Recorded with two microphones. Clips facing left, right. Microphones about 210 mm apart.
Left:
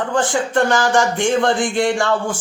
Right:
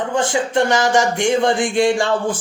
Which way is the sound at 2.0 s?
25° right (ahead or behind).